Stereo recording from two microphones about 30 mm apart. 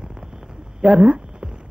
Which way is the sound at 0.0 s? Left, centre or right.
Right.